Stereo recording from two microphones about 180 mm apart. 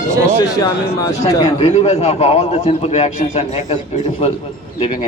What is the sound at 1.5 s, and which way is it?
A man's voice, 40° left (ahead or behind).